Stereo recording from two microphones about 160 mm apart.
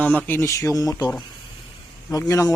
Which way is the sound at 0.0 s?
10° left (ahead or behind).